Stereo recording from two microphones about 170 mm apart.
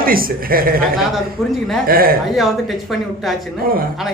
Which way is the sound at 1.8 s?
60° right (ahead or behind).